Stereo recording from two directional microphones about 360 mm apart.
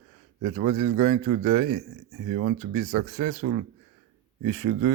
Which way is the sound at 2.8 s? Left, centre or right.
Right.